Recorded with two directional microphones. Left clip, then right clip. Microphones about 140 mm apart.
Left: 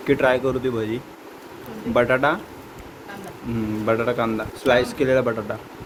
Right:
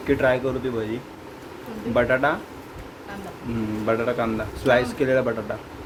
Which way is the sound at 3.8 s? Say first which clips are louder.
Left 2 dB; 30° left (ahead or behind).